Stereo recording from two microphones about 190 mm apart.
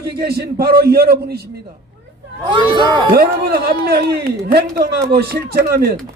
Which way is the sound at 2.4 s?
25° right (ahead or behind).